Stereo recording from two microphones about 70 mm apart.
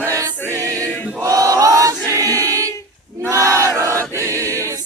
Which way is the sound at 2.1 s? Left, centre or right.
Right.